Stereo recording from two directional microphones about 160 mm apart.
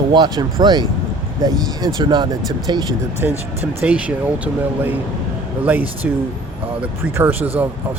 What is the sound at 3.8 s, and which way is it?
Speech, 10° right (ahead or behind).